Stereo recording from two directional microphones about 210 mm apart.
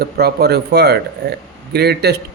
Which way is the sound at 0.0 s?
50° right (ahead or behind).